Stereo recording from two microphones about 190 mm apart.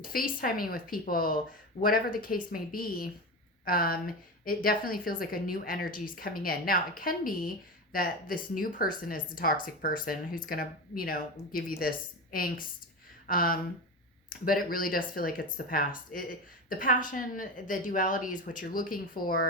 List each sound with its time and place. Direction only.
0.1 s speech: 50° left (ahead or behind)